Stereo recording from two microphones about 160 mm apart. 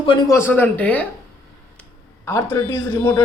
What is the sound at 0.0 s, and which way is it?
Speech, 30° left (ahead or behind).